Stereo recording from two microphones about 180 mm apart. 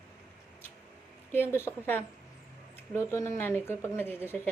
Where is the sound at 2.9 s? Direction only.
15° left (ahead or behind).